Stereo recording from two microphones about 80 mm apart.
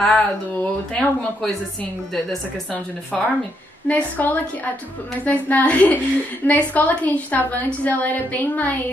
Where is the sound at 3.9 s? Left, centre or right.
Centre.